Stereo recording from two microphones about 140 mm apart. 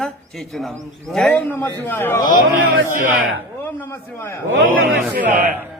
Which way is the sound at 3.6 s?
15° left (ahead or behind).